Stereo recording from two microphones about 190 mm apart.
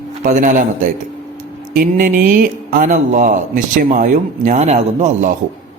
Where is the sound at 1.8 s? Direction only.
50° right (ahead or behind).